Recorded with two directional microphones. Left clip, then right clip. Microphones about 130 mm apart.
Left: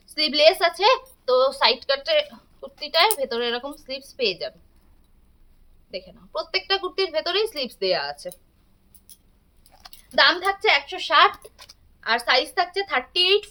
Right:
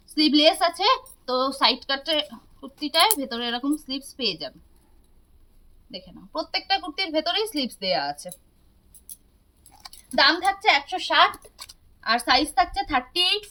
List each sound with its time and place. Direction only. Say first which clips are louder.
0.1 s speech: left 1 dB; 40° left (ahead or behind)
5.9 s speech: left 3 dB; 35° left (ahead or behind)
10.0 s a woman's voice: left 1 dB; 25° left (ahead or behind)